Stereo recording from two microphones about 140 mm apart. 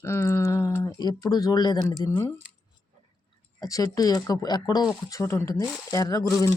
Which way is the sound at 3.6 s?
25° left (ahead or behind).